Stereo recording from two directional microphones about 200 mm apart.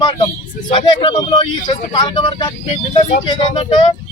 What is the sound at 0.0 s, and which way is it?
Speech, 20° left (ahead or behind).